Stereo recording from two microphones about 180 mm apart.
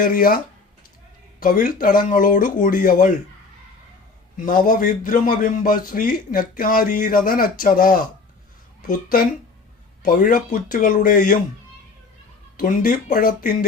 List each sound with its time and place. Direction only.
0.0 s speech: 50° left (ahead or behind)
4.4 s speech: 50° left (ahead or behind)
12.5 s speech: 50° left (ahead or behind)